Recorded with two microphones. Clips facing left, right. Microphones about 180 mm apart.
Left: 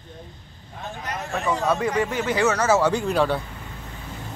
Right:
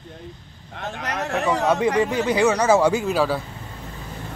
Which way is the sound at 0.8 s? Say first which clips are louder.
Right 4 dB; 75° right (ahead or behind).